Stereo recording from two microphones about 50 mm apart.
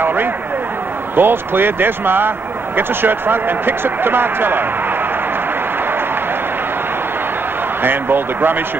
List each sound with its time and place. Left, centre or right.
0.0 s a man's voice: right
7.8 s a man's voice: right